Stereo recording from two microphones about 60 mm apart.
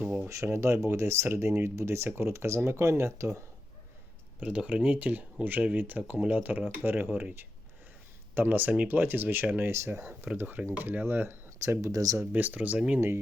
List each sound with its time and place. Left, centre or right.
0.0 s a sound: right
0.4 s speech: right
4.4 s speech: centre
6.7 s speech: right
8.4 s speech: right
9.7 s speech: right
10.0 s speech: right
11.6 s speech: right
12.2 s speech: right